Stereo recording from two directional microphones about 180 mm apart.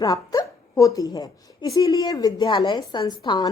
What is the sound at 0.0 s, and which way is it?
A woman's voice, 20° left (ahead or behind).